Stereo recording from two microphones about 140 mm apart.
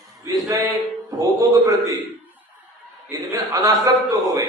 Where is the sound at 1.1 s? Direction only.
25° right (ahead or behind).